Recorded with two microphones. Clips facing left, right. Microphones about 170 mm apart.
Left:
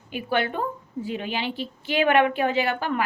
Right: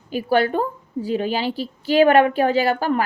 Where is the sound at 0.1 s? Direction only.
40° right (ahead or behind).